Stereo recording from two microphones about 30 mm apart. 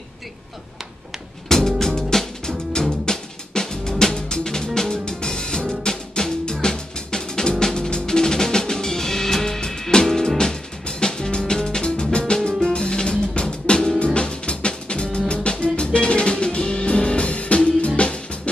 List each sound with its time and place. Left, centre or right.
1.5 s music: centre
5.7 s drum: left
10.0 s music: centre; by 18.5 s left